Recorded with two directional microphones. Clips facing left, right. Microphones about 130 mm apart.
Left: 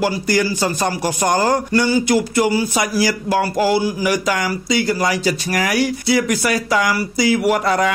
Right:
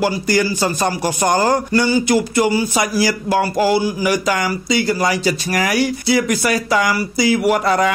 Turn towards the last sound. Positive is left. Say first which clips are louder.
# right 1 dB
turn(degrees=-25)  # may be behind; listen again after turning